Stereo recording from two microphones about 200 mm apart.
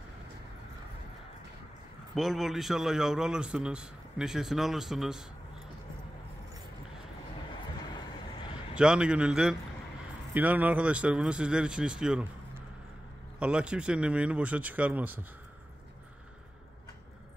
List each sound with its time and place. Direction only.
2.1 s a man's voice: centre (ahead or behind)
8.7 s a man's voice: 5° right (ahead or behind)
13.4 s a man's voice: 5° right (ahead or behind)